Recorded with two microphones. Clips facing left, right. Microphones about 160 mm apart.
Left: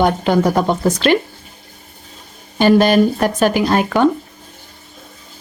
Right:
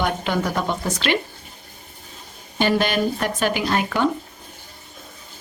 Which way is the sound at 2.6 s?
40° left (ahead or behind).